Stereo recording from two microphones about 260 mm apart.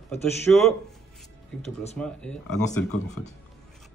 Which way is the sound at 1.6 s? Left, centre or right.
Left.